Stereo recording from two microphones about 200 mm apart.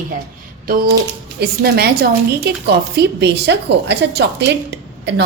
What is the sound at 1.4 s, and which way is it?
A woman's voice, 50° right (ahead or behind).